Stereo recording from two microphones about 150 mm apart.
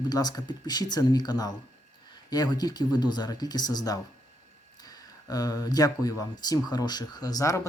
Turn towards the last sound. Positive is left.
turn(degrees=20)  # may be behind; listen again after turning